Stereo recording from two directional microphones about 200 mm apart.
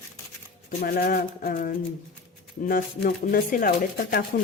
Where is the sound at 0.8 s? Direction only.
50° left (ahead or behind).